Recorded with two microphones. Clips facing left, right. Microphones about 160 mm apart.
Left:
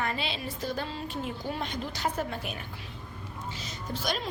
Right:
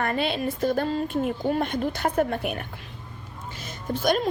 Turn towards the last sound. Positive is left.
turn(degrees=-50)  # may be behind; listen again after turning